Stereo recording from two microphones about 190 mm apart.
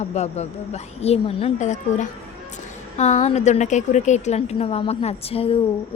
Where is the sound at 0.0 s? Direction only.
35° left (ahead or behind).